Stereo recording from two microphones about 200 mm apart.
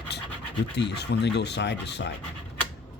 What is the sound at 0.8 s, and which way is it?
Speech, 55° left (ahead or behind).